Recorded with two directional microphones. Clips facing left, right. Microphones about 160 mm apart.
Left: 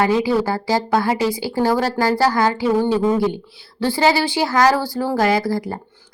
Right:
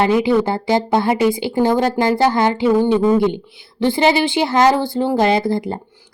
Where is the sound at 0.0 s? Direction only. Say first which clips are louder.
Right 2 dB; 20° right (ahead or behind).